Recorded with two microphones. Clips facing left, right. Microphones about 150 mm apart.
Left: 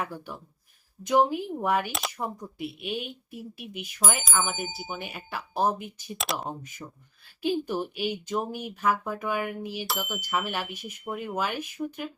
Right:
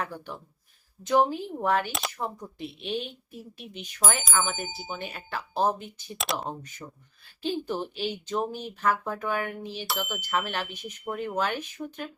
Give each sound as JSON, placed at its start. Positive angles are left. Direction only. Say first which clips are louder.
{"t": 1.0, "sound": "speech", "louder": "even", "side_deg": 15}
{"t": 1.9, "sound": "speech", "louder": "even", "side_deg": 0}
{"t": 2.1, "sound": "speech", "louder": "even", "side_deg": 10}